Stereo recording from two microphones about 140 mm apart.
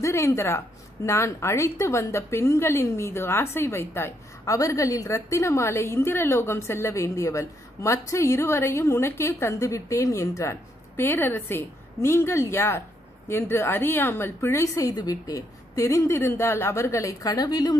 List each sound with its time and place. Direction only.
0.0 s a woman's voice: 20° left (ahead or behind)